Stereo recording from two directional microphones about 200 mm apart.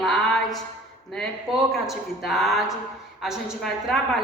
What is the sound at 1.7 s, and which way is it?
A woman's voice, centre (ahead or behind).